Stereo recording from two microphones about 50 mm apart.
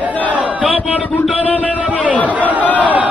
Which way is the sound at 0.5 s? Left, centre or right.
Right.